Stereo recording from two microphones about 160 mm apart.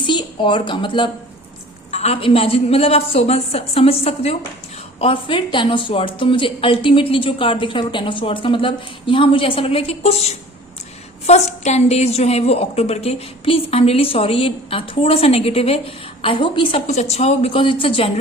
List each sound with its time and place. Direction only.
0.0 s a woman's voice: 30° left (ahead or behind)
1.9 s a woman's voice: 40° left (ahead or behind)
16.8 s a woman's voice: 45° left (ahead or behind)